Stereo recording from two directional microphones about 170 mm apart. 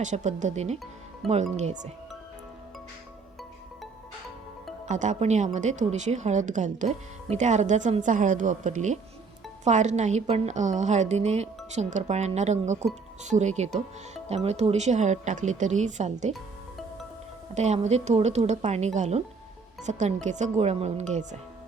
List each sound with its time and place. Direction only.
0.0 s a woman's voice: 45° right (ahead or behind)
1.2 s speech: centre (ahead or behind)
4.9 s a woman's voice: 45° right (ahead or behind)
16.3 s music: centre (ahead or behind)
17.5 s a woman's voice: 40° right (ahead or behind)